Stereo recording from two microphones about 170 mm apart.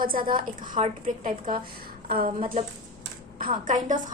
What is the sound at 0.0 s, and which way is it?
A woman's voice, 55° right (ahead or behind).